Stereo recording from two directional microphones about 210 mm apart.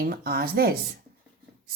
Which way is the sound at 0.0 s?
45° right (ahead or behind).